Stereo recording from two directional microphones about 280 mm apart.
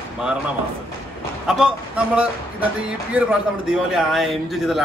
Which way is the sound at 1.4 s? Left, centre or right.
Centre.